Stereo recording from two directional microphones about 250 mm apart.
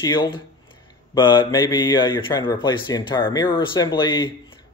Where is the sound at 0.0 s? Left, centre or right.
Centre.